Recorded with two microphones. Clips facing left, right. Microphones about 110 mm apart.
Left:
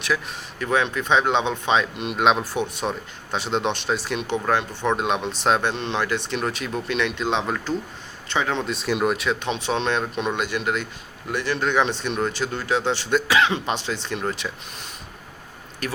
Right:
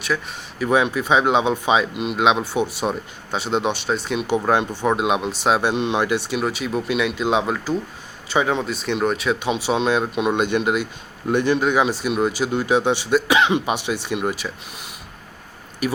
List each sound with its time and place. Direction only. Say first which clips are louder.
0.0 s speech: right 1 dB; centre (ahead or behind)
4.4 s speech: right 2 dB; 15° right (ahead or behind)
8.6 s speech: right 1 dB; centre (ahead or behind)
10.3 s speech: right 5 dB; 20° right (ahead or behind)